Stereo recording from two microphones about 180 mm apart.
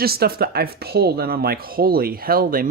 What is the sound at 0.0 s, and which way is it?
Speech, 60° right (ahead or behind).